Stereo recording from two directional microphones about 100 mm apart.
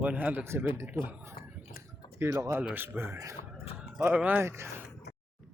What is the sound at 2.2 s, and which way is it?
A man's voice, 30° right (ahead or behind).